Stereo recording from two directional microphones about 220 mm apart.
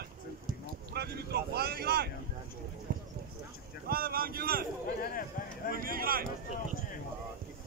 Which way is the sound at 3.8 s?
40° right (ahead or behind).